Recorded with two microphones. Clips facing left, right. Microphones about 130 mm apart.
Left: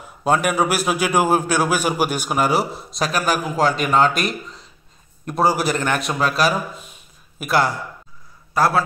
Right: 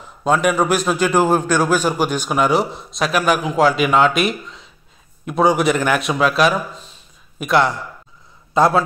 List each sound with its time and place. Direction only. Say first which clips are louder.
0.0 s a sound: right 2 dB; 5° left (ahead or behind)
0.6 s a man's voice: right 2 dB; 10° left (ahead or behind)
8.5 s a man's voice: right 3 dB; 20° right (ahead or behind)